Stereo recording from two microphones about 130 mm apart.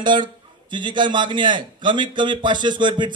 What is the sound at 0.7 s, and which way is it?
A man's voice, 35° right (ahead or behind).